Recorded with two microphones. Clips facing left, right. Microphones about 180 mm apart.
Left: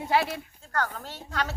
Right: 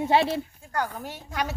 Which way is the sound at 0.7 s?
10° right (ahead or behind).